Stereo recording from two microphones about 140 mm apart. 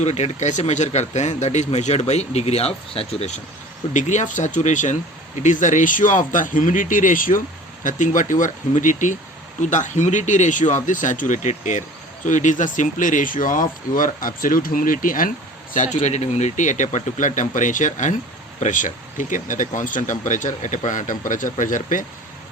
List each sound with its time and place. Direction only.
0.0 s speech: 50° left (ahead or behind); by 15.3 s 75° left (ahead or behind)
15.7 s speech: 60° left (ahead or behind)
16.0 s speech: 50° left (ahead or behind); by 22.0 s 65° left (ahead or behind)